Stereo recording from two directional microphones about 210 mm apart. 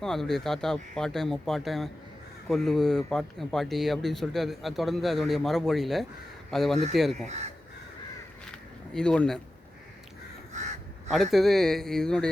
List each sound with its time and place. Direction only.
0.0 s speech: centre (ahead or behind)
7.3 s speech: 30° right (ahead or behind)
8.9 s speech: 5° left (ahead or behind)
11.1 s speech: centre (ahead or behind)